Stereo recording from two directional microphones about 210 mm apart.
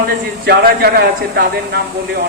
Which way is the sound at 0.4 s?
50° right (ahead or behind).